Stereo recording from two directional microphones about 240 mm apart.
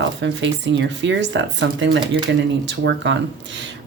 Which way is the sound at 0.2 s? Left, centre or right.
Right.